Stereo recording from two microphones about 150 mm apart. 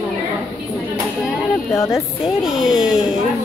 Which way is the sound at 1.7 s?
20° left (ahead or behind).